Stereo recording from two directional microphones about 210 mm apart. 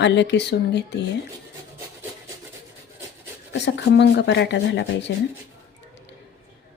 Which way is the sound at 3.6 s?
55° left (ahead or behind).